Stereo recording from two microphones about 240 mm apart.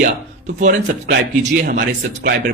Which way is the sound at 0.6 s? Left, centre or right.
Right.